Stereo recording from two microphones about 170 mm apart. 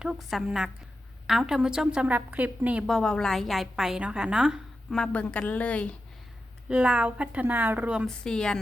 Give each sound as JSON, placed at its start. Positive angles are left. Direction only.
{"t": 0.0, "sound": "a woman's voice", "side_deg": 0}
{"t": 6.7, "sound": "a woman's voice", "side_deg": -5}